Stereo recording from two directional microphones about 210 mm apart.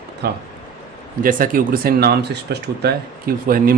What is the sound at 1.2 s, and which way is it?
Speech, 40° right (ahead or behind).